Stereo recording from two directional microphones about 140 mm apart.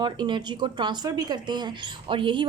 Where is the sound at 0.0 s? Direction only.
35° right (ahead or behind).